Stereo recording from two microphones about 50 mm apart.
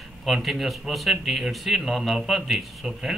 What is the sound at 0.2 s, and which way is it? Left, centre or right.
A man's voice, centre.